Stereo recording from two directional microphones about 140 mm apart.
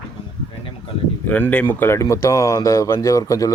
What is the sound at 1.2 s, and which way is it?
Speech, 10° left (ahead or behind).